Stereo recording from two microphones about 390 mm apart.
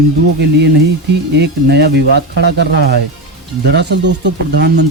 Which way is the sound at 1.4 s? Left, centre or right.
Right.